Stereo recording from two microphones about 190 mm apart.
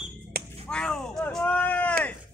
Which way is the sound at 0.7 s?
5° left (ahead or behind).